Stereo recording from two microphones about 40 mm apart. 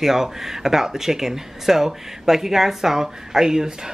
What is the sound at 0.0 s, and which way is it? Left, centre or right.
Speech, centre.